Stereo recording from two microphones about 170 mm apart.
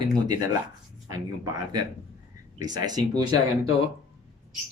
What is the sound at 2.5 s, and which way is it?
Speech, 25° right (ahead or behind).